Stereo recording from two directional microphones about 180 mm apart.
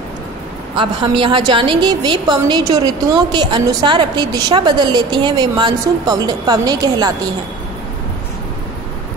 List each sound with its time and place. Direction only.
0.7 s a woman's voice: 25° right (ahead or behind)